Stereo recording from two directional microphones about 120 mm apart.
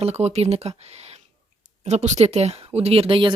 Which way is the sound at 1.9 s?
70° right (ahead or behind).